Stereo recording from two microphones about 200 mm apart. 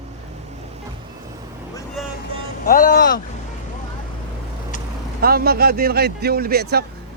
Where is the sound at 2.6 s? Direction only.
45° left (ahead or behind).